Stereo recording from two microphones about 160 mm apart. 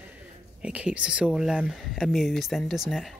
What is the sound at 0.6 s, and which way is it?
Speech, 10° right (ahead or behind).